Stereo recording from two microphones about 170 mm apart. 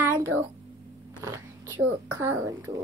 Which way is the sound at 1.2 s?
15° right (ahead or behind).